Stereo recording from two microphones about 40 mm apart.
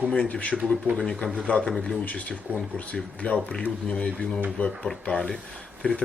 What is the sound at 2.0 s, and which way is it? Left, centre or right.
Speech, left.